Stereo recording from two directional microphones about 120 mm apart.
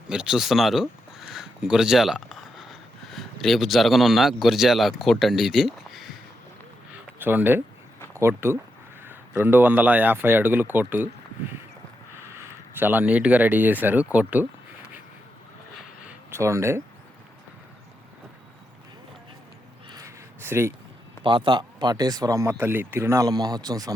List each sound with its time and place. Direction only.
0.1 s speech: 5° right (ahead or behind)
7.2 s speech: 15° right (ahead or behind)
12.7 s speech: 15° right (ahead or behind)
16.3 s speech: 25° right (ahead or behind)
19.9 s a sound: 25° right (ahead or behind)
21.2 s speech: 40° right (ahead or behind)